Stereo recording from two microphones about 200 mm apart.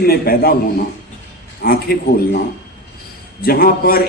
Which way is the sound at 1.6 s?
50° left (ahead or behind).